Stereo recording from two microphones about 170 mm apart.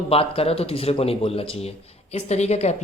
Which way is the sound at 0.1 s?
35° left (ahead or behind).